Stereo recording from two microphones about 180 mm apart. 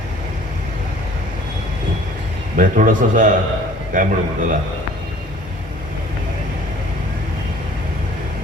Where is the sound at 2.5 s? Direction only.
50° right (ahead or behind).